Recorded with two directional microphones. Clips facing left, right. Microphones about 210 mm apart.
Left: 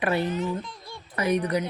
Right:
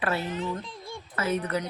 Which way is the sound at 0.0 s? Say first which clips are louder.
Left 4 dB; 15° left (ahead or behind).